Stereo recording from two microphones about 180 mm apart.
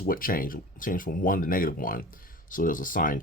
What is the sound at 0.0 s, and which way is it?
Speech, 50° left (ahead or behind).